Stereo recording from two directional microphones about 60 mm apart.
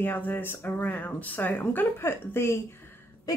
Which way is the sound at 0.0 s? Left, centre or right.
Left.